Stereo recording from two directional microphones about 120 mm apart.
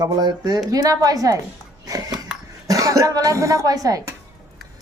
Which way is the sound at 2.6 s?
30° right (ahead or behind).